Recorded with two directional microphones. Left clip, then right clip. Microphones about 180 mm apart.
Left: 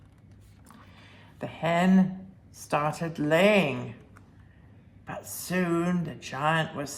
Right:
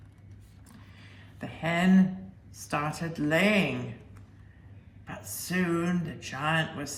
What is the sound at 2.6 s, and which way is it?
Speech, 35° left (ahead or behind).